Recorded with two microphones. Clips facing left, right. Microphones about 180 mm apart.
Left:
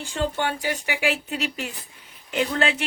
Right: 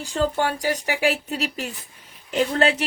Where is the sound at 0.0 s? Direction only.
40° right (ahead or behind).